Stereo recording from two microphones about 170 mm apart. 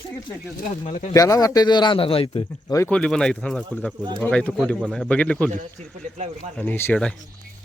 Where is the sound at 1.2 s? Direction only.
20° left (ahead or behind).